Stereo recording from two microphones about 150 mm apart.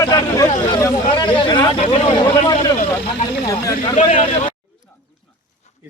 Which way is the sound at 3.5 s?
25° left (ahead or behind).